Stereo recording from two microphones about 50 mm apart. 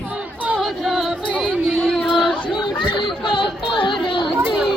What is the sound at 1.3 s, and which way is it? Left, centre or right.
Music, right.